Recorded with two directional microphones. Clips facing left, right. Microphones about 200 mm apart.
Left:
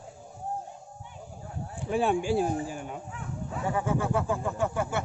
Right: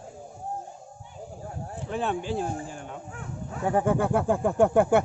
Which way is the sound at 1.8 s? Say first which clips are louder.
Left 3 dB; 10° left (ahead or behind).